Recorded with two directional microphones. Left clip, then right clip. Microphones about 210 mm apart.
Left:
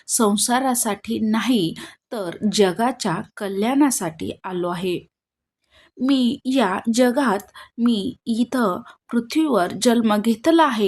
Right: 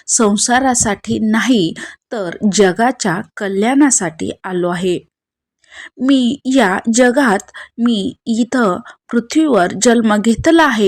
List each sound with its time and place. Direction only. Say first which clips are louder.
0.0 s a woman's voice: right 6 dB; 20° right (ahead or behind)